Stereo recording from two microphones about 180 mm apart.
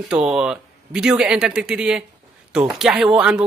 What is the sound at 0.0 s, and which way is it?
A man's voice, 5° right (ahead or behind).